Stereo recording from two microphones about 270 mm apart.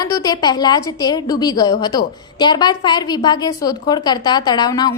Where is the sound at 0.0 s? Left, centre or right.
Centre.